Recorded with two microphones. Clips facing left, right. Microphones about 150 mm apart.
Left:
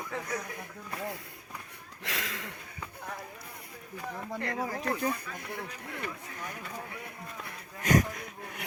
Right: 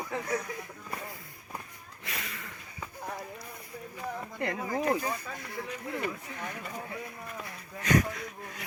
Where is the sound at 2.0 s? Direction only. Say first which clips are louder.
Left 3 dB; 90° left.